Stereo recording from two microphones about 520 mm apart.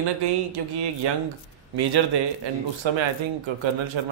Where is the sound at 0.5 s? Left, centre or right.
Right.